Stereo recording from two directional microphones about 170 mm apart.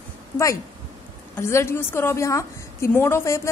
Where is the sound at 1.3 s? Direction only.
15° left (ahead or behind).